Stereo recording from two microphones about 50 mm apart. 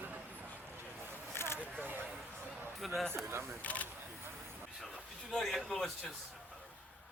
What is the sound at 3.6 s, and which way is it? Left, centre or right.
Speech, left.